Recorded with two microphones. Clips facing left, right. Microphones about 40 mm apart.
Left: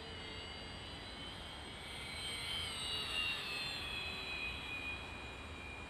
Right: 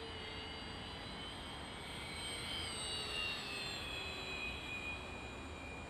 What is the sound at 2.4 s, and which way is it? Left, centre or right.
Vehicle, left.